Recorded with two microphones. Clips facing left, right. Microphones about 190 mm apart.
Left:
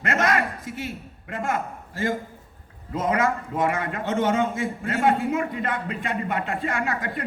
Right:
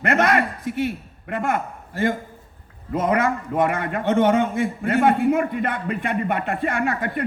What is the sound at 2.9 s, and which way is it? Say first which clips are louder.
A man's voice: right 3 dB; 60° right (ahead or behind).